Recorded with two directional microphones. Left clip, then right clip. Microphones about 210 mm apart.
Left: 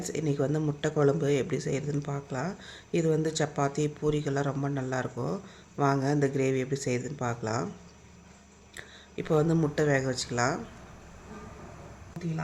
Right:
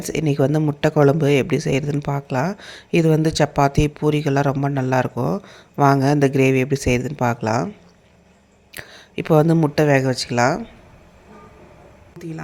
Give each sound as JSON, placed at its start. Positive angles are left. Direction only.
{"t": 0.0, "sound": "speech", "side_deg": -45}
{"t": 8.7, "sound": "speech", "side_deg": -45}